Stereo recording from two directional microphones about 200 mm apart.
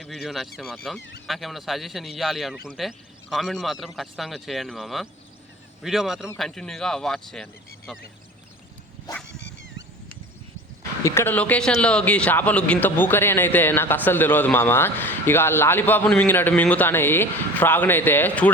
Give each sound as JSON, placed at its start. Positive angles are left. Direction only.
{"t": 0.0, "sound": "a man's voice", "side_deg": 0}
{"t": 9.4, "sound": "a sound", "side_deg": 60}
{"t": 11.0, "sound": "speech", "side_deg": 10}